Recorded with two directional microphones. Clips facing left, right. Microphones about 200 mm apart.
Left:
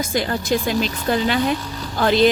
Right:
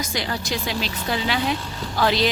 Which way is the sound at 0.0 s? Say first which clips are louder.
Left 5 dB; 50° left (ahead or behind).